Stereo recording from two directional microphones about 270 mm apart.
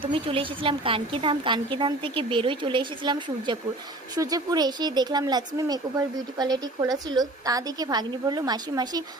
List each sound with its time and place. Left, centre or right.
0.0 s a woman's voice: centre